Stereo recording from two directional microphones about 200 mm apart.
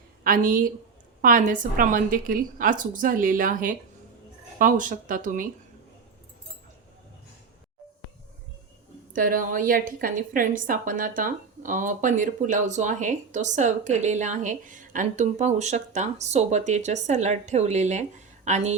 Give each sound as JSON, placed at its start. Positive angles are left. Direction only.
{"t": 0.3, "sound": "a woman's voice", "side_deg": -45}
{"t": 9.1, "sound": "a woman's voice", "side_deg": -45}